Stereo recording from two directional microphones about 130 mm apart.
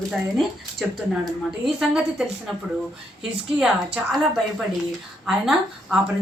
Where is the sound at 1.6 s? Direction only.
5° right (ahead or behind).